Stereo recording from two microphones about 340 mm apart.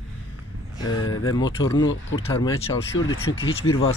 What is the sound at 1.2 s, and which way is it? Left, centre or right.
Speech, centre.